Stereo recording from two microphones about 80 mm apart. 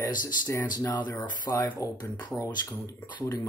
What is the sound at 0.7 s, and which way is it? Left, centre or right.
Speech, left.